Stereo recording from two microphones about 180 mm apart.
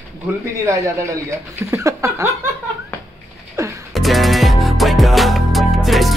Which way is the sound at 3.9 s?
Centre (ahead or behind).